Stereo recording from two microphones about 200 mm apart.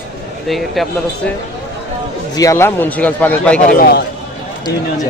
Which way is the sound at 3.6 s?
45° left (ahead or behind).